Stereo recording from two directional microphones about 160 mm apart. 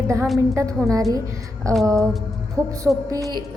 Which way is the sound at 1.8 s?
20° right (ahead or behind).